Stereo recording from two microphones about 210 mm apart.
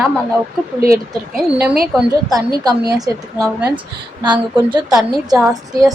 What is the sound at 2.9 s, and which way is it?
A woman's voice, 15° right (ahead or behind).